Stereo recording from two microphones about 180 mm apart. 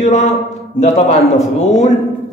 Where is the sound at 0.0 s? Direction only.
40° left (ahead or behind).